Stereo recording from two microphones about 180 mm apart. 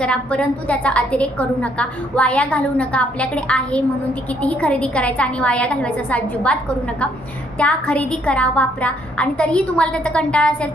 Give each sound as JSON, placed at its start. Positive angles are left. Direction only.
{"t": 0.0, "sound": "a woman's voice", "side_deg": 5}
{"t": 7.6, "sound": "a woman's voice", "side_deg": 5}